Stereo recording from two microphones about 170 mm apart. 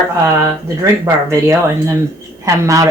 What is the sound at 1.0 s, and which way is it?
A man's voice, 15° right (ahead or behind).